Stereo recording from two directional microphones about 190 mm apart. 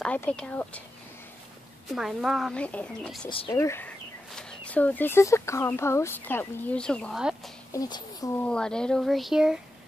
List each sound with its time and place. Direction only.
0.0 s speech: 5° left (ahead or behind)
2.0 s speech: centre (ahead or behind)
3.3 s speech: 25° left (ahead or behind)
3.5 s speech: 15° left (ahead or behind); by 7.5 s centre (ahead or behind)
7.7 s speech: 20° left (ahead or behind)
8.5 s speech: 5° left (ahead or behind)